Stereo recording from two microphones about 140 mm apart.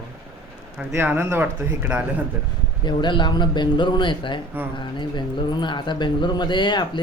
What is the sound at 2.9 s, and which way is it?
Speech, 35° left (ahead or behind).